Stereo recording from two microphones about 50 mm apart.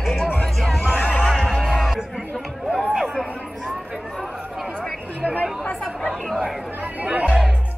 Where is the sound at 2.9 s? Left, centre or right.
Centre.